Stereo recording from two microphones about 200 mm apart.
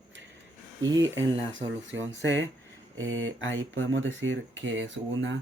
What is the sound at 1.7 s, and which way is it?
Speech, 70° right (ahead or behind).